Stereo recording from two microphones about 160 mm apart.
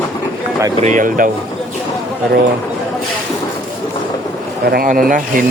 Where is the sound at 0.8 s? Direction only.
55° right (ahead or behind).